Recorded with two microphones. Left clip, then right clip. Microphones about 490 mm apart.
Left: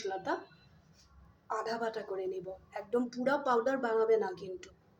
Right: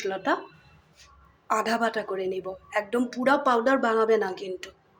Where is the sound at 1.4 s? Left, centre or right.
Left.